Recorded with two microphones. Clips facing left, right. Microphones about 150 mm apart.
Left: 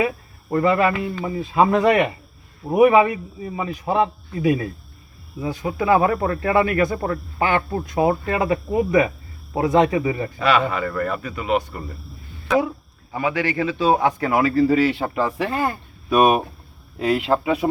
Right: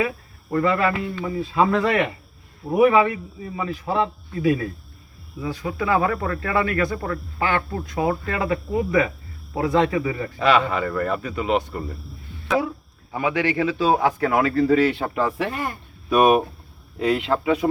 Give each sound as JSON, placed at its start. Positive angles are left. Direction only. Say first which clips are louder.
{"t": 0.5, "sound": "speech", "louder": "left 2 dB", "side_deg": 25}
{"t": 10.8, "sound": "a man's voice", "louder": "even", "side_deg": -5}
{"t": 11.3, "sound": "speech", "louder": "left 1 dB", "side_deg": -25}
{"t": 13.1, "sound": "a man's voice", "louder": "even", "side_deg": -15}
{"t": 13.6, "sound": "speech", "louder": "left 2 dB", "side_deg": -5}